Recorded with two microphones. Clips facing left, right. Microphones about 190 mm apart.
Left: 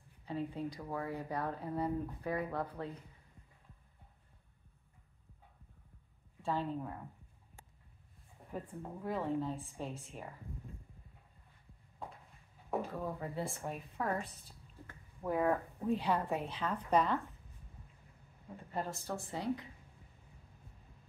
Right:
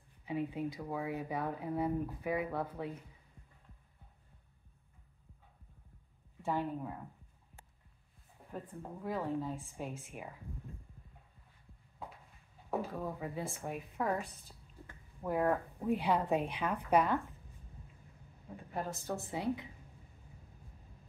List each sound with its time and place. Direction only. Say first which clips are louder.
0.3 s speech: right 2 dB; 10° right (ahead or behind)
6.4 s speech: right 1 dB; 15° right (ahead or behind)
8.5 s a woman's voice: left 1 dB; centre (ahead or behind)
12.9 s a woman's voice: even; 5° right (ahead or behind)
15.9 s speech: right 2 dB; 15° right (ahead or behind)
18.7 s a woman's voice: even; 5° right (ahead or behind)
19.0 s speech: right 2 dB; 20° right (ahead or behind)